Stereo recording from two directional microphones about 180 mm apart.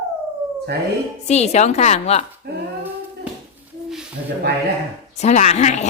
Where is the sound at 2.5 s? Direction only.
60° right (ahead or behind).